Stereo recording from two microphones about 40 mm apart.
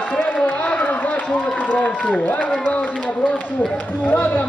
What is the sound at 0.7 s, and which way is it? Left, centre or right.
Speech, left.